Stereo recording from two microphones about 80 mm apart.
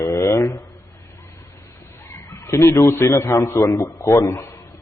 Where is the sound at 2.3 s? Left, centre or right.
Left.